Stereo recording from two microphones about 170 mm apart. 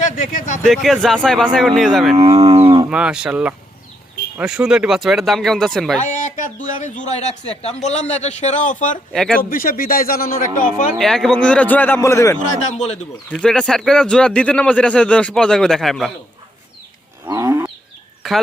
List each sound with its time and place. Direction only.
0.0 s speech: 50° left (ahead or behind)
0.6 s a man's voice: centre (ahead or behind)
2.1 s cattle: 35° right (ahead or behind)
2.9 s a man's voice: 5° right (ahead or behind)
6.0 s a man's voice: 45° left (ahead or behind)
9.1 s a man's voice: 5° left (ahead or behind)
9.4 s a man's voice: 55° left (ahead or behind)
10.9 s a man's voice: centre (ahead or behind); by 12.4 s 15° left (ahead or behind)
12.4 s a man's voice: 45° left (ahead or behind)
13.3 s a man's voice: 5° left (ahead or behind)
17.2 s livestock: 15° right (ahead or behind)
18.2 s a sound: centre (ahead or behind)